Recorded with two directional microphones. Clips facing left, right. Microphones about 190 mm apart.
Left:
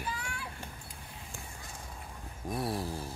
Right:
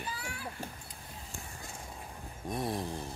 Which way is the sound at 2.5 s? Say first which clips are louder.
Even; 5° left (ahead or behind).